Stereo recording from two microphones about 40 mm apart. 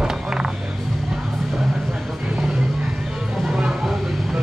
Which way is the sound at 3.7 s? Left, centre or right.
Centre.